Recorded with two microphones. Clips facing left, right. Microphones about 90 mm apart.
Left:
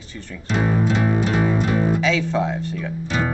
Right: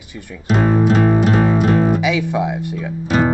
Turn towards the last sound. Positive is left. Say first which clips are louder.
# right 7 dB
turn(degrees=-40)  # may be behind; listen again after turning